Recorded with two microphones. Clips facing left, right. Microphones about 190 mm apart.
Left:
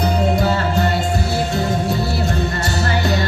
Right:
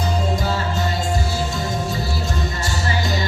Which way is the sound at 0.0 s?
65° left (ahead or behind).